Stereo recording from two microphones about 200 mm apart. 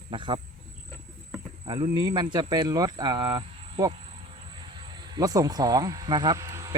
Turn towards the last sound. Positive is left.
turn(degrees=-15)  # may be behind; listen again after turning